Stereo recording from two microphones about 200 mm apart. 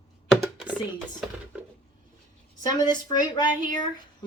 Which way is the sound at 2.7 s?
20° left (ahead or behind).